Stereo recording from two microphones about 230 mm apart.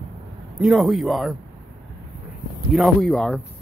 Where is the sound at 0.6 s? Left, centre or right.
Centre.